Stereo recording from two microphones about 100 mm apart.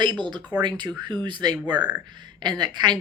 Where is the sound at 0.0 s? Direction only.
50° right (ahead or behind).